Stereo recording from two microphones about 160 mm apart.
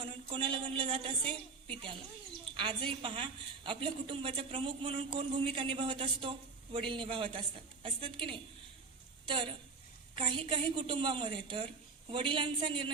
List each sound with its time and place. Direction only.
0.0 s a woman's voice: 30° right (ahead or behind)
9.2 s a woman's voice: 30° right (ahead or behind)